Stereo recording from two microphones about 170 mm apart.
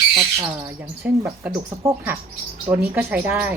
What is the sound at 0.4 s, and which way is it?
Speech, 10° right (ahead or behind).